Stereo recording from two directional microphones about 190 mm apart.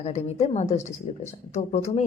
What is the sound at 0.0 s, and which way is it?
Speech, 35° left (ahead or behind).